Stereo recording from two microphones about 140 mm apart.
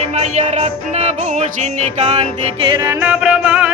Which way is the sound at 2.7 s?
25° right (ahead or behind).